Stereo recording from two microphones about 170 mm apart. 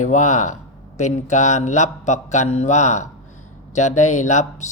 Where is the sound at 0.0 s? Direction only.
45° left (ahead or behind).